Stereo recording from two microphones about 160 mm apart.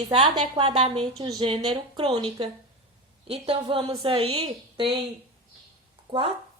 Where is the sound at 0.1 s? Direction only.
30° right (ahead or behind).